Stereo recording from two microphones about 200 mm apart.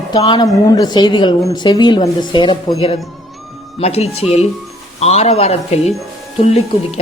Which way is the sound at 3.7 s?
30° left (ahead or behind).